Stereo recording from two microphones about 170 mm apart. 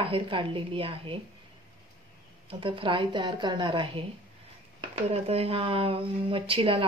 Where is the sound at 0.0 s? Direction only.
30° right (ahead or behind).